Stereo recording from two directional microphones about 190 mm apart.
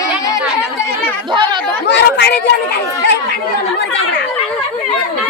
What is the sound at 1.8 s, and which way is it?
Chatter, 65° left (ahead or behind).